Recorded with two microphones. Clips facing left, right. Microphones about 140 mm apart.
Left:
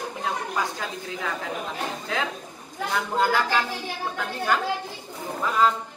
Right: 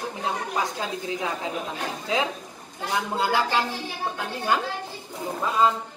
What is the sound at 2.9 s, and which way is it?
Speech, 15° right (ahead or behind).